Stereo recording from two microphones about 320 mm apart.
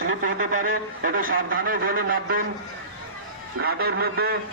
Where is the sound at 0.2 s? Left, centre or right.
Right.